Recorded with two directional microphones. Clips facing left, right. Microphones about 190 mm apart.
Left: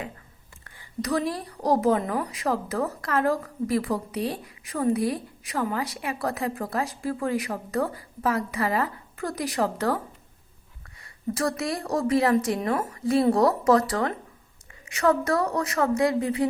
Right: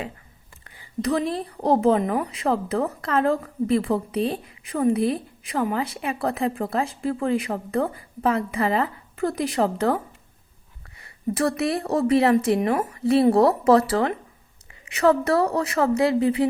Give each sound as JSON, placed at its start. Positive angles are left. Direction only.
{"t": 1.0, "sound": "a woman's voice", "side_deg": -25}
{"t": 11.6, "sound": "a woman's voice", "side_deg": -25}